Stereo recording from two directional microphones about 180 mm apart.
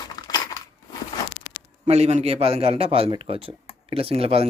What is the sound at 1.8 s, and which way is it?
A man's voice, 35° right (ahead or behind).